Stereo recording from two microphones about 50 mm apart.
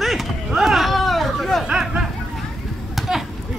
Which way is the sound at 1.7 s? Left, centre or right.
Centre.